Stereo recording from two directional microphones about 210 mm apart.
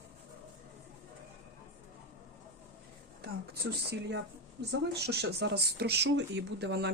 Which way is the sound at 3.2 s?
50° right (ahead or behind).